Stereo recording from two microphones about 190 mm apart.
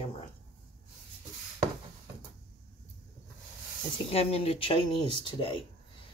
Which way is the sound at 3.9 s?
30° left (ahead or behind).